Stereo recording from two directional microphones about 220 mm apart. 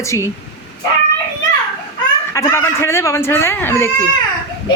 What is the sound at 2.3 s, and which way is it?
A woman's voice, 15° left (ahead or behind).